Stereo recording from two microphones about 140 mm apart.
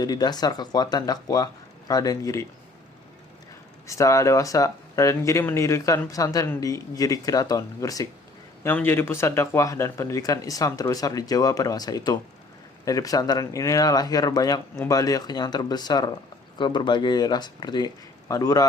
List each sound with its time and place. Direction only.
0.0 s speech: 30° left (ahead or behind)
3.8 s speech: 20° left (ahead or behind)
8.6 s speech: 15° left (ahead or behind)